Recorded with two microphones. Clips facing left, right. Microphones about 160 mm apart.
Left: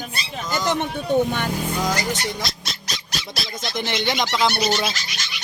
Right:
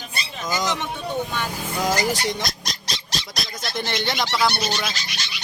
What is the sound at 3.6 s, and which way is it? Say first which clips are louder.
Speech: left 2 dB; 20° left (ahead or behind).